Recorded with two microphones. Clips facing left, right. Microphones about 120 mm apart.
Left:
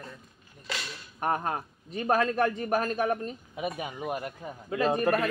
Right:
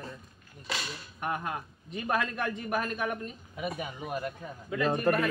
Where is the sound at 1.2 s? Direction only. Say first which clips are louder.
Left 5 dB; 35° left (ahead or behind).